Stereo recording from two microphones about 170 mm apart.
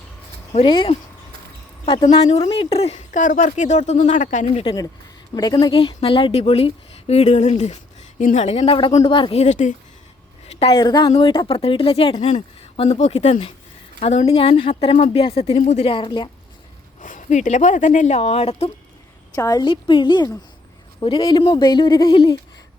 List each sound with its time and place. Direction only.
0.5 s a woman's voice: 30° left (ahead or behind)
2.4 s speech: 30° left (ahead or behind)
5.3 s a woman's voice: 25° left (ahead or behind); by 9.7 s 45° left (ahead or behind)
10.6 s a woman's voice: 30° left (ahead or behind)
17.0 s speech: 50° left (ahead or behind)
19.4 s speech: 20° left (ahead or behind)